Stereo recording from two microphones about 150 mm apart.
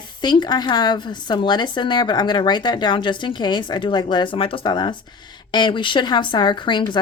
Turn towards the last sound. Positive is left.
turn(degrees=30)  # may be behind; listen again after turning